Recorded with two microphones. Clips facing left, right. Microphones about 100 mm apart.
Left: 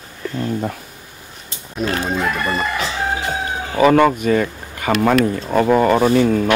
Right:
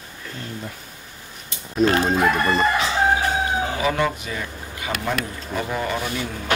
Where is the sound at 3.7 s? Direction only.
60° left (ahead or behind).